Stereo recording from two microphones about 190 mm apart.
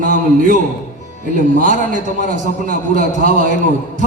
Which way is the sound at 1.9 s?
40° right (ahead or behind).